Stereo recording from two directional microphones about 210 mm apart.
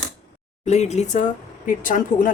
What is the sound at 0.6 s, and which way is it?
Speech, 30° left (ahead or behind).